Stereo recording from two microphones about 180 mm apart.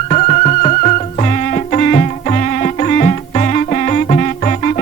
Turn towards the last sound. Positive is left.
turn(degrees=45)  # may be behind; listen again after turning